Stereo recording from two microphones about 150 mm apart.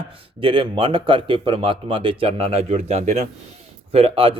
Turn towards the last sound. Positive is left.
turn(degrees=-40)  # may be behind; listen again after turning